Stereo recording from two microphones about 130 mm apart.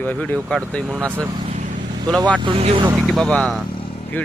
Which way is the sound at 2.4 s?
40° right (ahead or behind).